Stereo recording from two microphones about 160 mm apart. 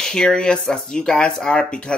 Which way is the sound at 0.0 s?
5° left (ahead or behind).